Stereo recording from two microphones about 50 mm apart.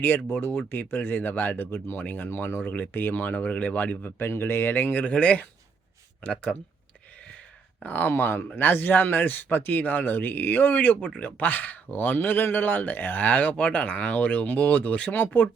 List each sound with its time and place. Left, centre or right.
0.0 s a man's voice: left
2.6 s a man's voice: left
4.2 s speech: left
5.0 s speech: left
7.8 s a man's voice: left
8.1 s a man's voice: left